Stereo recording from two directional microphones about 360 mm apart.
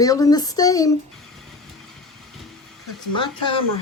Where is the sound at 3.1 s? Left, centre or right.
Centre.